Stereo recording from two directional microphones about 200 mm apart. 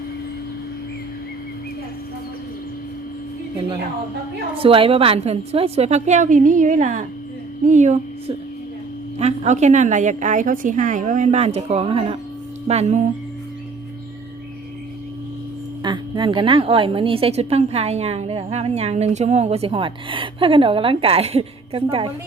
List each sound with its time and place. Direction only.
4.5 s a woman's voice: 25° right (ahead or behind)
9.1 s a woman's voice: 35° right (ahead or behind)
15.8 s a woman's voice: 25° right (ahead or behind)